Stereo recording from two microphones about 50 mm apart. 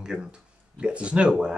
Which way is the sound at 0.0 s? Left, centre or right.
Centre.